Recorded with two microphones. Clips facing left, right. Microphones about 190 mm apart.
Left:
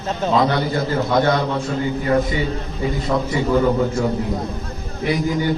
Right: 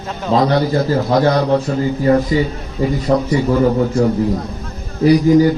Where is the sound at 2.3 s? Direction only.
35° right (ahead or behind).